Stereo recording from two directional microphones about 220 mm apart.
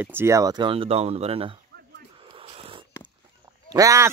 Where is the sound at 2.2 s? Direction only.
25° right (ahead or behind).